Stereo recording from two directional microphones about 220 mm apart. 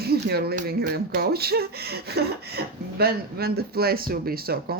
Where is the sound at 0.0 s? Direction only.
45° right (ahead or behind).